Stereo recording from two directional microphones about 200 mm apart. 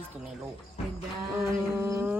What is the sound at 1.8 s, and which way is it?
Music, 10° right (ahead or behind).